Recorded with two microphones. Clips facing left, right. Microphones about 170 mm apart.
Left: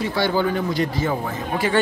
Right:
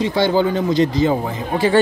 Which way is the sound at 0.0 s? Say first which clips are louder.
Right 4 dB; 20° right (ahead or behind).